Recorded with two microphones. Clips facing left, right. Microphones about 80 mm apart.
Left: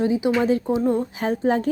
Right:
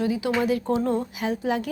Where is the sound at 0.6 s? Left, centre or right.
Centre.